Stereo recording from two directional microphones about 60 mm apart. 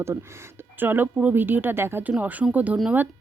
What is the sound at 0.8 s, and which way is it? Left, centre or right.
Speech, right.